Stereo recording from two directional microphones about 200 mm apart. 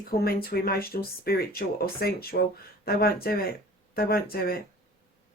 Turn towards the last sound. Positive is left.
turn(degrees=50)  # may be behind; listen again after turning